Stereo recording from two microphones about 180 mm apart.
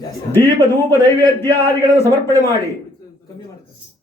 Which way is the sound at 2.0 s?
15° left (ahead or behind).